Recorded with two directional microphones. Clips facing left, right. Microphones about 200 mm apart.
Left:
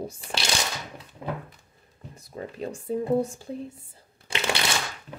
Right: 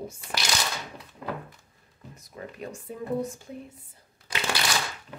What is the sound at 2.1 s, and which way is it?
Speech, 30° left (ahead or behind).